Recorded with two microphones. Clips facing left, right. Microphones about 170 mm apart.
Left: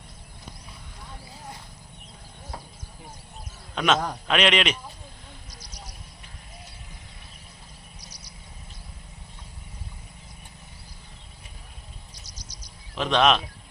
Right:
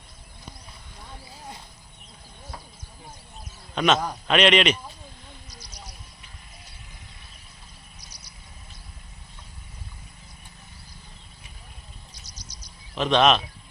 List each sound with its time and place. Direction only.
3.8 s a man's voice: centre (ahead or behind)
5.5 s a sound: 40° left (ahead or behind)
13.0 s speech: 5° left (ahead or behind)